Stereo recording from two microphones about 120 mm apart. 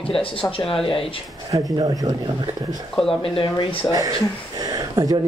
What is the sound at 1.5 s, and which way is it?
Speech, 30° right (ahead or behind).